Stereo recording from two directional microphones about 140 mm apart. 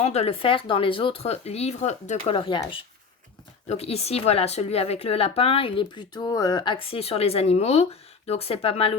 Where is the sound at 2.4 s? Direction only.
35° left (ahead or behind).